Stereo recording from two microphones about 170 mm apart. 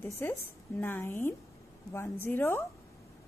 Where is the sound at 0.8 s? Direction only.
10° left (ahead or behind).